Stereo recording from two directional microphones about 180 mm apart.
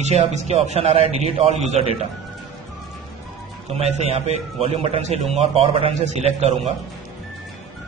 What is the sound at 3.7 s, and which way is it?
A man's voice, 35° right (ahead or behind).